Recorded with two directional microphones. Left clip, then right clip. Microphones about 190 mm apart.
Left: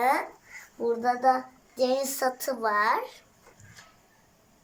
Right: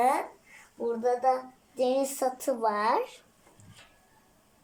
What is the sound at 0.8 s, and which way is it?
A woman's voice, 10° right (ahead or behind).